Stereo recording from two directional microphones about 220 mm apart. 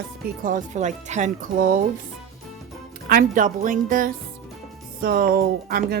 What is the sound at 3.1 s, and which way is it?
Speech, 40° right (ahead or behind).